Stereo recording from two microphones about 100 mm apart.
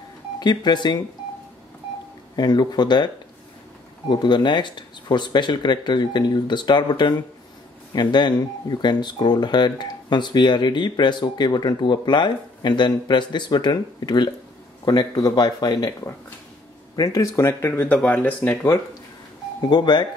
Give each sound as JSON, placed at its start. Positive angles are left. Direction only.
{"t": 0.4, "sound": "speech", "side_deg": 45}
{"t": 2.3, "sound": "speech", "side_deg": 45}
{"t": 4.1, "sound": "speech", "side_deg": 50}
{"t": 16.9, "sound": "speech", "side_deg": 40}
{"t": 19.7, "sound": "speech", "side_deg": 45}